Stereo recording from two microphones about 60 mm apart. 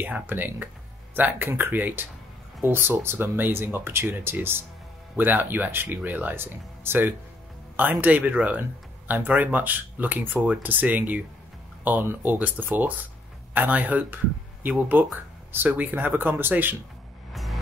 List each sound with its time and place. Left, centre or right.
0.0 s speech: right
17.3 s music: centre